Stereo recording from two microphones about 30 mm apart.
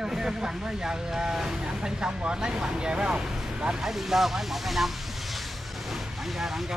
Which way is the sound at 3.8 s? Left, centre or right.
Centre.